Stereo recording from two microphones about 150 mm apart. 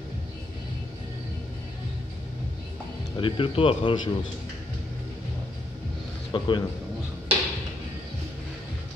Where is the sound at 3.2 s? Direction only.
35° left (ahead or behind).